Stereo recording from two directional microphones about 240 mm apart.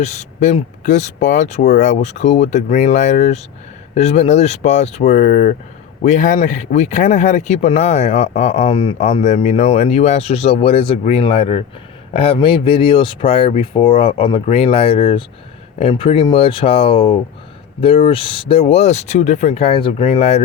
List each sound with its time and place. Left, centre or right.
0.0 s speech: left